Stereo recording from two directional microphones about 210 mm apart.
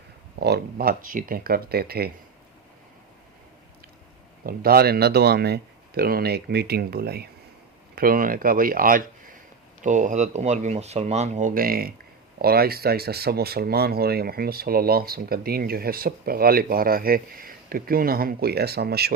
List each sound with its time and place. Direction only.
0.3 s speech: 50° right (ahead or behind)
4.4 s speech: 45° right (ahead or behind)